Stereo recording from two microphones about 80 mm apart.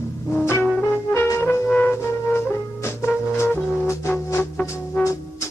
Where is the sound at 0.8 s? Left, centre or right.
Left.